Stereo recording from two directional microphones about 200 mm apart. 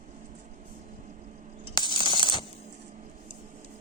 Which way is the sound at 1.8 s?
25° left (ahead or behind).